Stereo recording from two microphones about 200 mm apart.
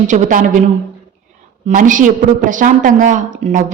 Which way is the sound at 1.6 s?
40° right (ahead or behind).